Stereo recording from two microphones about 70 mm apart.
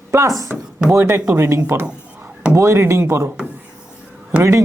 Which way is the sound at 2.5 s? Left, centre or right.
Right.